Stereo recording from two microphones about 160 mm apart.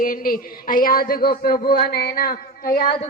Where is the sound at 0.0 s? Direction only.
60° left (ahead or behind).